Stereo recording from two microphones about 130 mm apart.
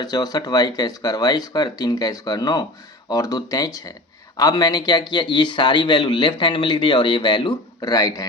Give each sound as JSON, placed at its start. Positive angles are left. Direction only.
{"t": 0.0, "sound": "a man's voice", "side_deg": 30}